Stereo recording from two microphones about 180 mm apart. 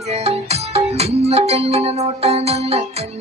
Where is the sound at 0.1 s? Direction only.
35° right (ahead or behind).